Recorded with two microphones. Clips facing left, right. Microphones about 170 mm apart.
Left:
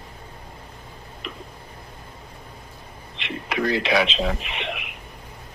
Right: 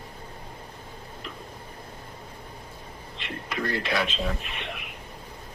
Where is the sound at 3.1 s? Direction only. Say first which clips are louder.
Left 6 dB; 85° left.